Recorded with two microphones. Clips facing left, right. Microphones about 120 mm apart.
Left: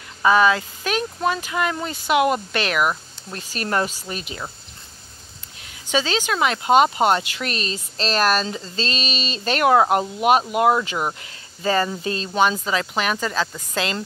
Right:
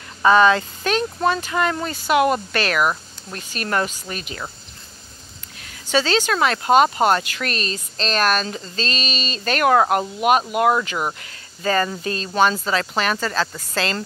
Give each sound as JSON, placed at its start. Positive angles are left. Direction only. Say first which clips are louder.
{"t": 0.2, "sound": "speech", "louder": "right 2 dB", "side_deg": 10}
{"t": 3.3, "sound": "speech", "louder": "even", "side_deg": 30}
{"t": 5.6, "sound": "speech", "louder": "right 2 dB", "side_deg": 15}